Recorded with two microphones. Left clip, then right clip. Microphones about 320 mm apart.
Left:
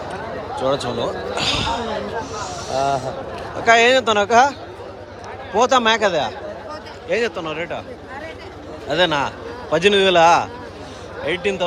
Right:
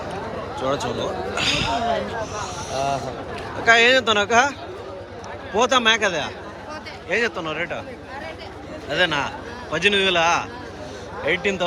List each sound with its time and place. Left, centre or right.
0.5 s speech: centre
1.6 s speech: left
2.3 s speech: centre
2.6 s speech: left
3.6 s speech: centre
5.5 s speech: centre
8.9 s speech: centre